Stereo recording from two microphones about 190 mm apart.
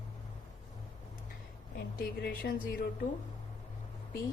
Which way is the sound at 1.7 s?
55° left (ahead or behind).